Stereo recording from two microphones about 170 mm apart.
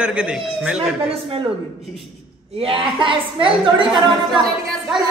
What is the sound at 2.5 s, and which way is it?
A woman's voice, 30° right (ahead or behind).